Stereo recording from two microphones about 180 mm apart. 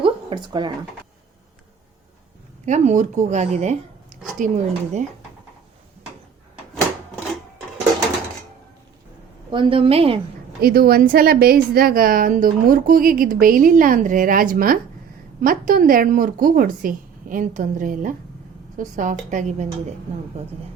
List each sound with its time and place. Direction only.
0.0 s a sound: 25° right (ahead or behind)
2.6 s a woman's voice: 40° right (ahead or behind)
9.5 s speech: 30° right (ahead or behind)
10.6 s a woman's voice: 60° right (ahead or behind); by 19.6 s 45° right (ahead or behind)